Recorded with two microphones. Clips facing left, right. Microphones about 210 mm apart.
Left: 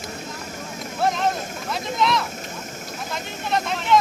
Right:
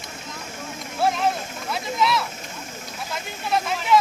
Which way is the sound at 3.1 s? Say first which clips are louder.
Even; 5° right (ahead or behind).